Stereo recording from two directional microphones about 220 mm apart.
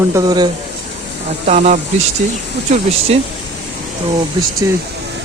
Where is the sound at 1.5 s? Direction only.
35° right (ahead or behind).